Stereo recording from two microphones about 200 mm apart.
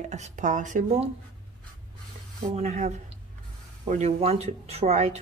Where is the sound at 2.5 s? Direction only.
35° right (ahead or behind).